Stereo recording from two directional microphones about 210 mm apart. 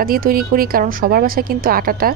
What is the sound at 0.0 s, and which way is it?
Speech, 45° right (ahead or behind).